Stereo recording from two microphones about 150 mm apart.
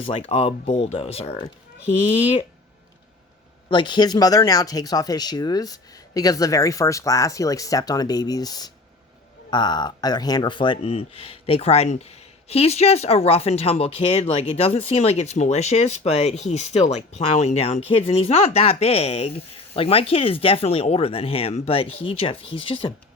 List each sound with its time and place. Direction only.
0.0 s speech: 40° left (ahead or behind)
3.7 s speech: 30° left (ahead or behind)